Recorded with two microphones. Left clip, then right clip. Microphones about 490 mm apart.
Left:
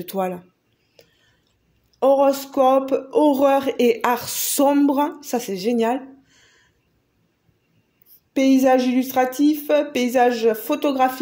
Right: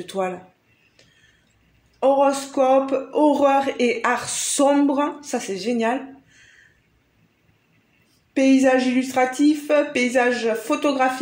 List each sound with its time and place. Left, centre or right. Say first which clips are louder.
0.0 s speech: left 1 dB; left
2.0 s speech: left 1 dB; left
8.3 s speech: left 1 dB; left